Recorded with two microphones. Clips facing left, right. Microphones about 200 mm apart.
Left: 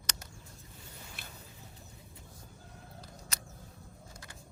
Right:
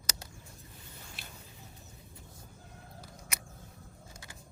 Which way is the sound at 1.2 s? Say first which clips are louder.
Even; 50° left (ahead or behind).